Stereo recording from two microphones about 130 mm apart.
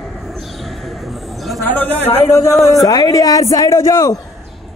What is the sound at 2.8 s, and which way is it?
Speech, 30° left (ahead or behind).